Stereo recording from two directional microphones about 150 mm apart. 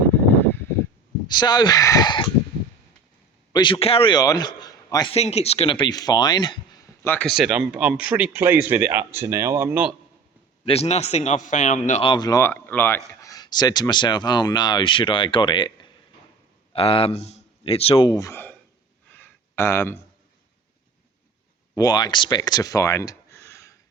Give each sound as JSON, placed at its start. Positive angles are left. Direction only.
{"t": 0.4, "sound": "a sound", "side_deg": 15}
{"t": 1.3, "sound": "speech", "side_deg": 30}
{"t": 3.5, "sound": "a man's voice", "side_deg": 35}
{"t": 5.1, "sound": "speech", "side_deg": 45}
{"t": 7.0, "sound": "speech", "side_deg": 15}
{"t": 7.3, "sound": "speech", "side_deg": -5}
{"t": 10.7, "sound": "a man's voice", "side_deg": 45}
{"t": 12.0, "sound": "speech", "side_deg": 30}
{"t": 12.5, "sound": "a man's voice", "side_deg": 15}
{"t": 18.1, "sound": "speech", "side_deg": 20}
{"t": 19.1, "sound": "a sound", "side_deg": 15}
{"t": 21.8, "sound": "speech", "side_deg": 25}